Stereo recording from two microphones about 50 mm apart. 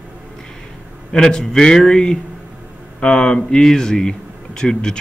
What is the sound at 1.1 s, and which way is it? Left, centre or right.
Speech, centre.